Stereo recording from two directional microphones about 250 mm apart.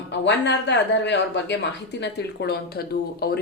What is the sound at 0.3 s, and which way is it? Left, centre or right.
Speech, left.